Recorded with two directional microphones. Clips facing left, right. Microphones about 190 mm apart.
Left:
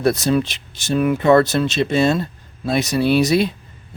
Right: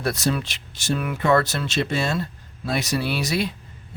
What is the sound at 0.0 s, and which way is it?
Speech, 20° left (ahead or behind).